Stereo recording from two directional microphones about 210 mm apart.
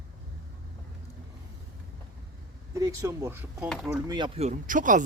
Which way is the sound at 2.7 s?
15° right (ahead or behind).